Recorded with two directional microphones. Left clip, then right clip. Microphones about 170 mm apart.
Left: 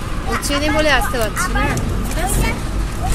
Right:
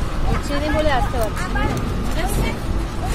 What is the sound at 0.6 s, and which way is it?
Speech, 25° left (ahead or behind).